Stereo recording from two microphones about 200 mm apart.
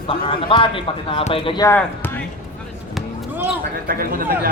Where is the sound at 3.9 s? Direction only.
45° right (ahead or behind).